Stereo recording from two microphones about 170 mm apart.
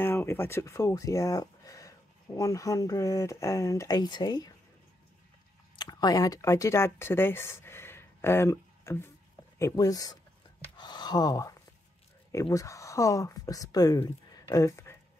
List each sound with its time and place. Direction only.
0.0 s speech: 15° left (ahead or behind)
5.8 s speech: 25° left (ahead or behind)